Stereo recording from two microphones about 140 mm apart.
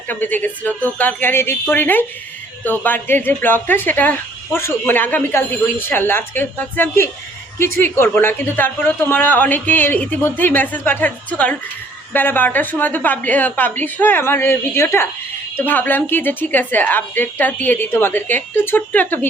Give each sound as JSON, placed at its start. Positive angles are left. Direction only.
{"t": 0.1, "sound": "a woman's voice", "side_deg": 15}